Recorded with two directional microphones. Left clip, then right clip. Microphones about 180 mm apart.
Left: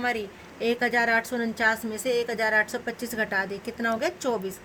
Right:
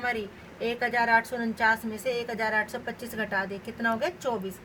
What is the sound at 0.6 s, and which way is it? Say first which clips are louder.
A woman's voice: left 3 dB; 55° left (ahead or behind).